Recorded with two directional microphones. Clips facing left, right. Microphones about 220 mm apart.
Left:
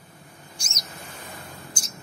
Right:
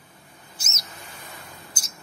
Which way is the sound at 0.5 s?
5° right (ahead or behind).